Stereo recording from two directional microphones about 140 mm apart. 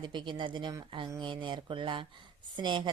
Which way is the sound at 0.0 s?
35° right (ahead or behind).